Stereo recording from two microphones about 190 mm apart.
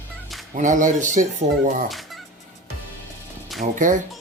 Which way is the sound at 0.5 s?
40° right (ahead or behind).